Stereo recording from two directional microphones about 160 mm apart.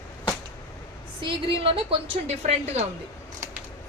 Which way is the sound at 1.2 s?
35° right (ahead or behind).